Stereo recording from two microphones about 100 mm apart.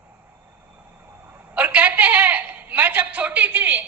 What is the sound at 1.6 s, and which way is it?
A woman's voice, 15° right (ahead or behind).